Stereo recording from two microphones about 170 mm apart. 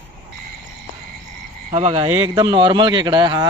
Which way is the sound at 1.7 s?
35° right (ahead or behind).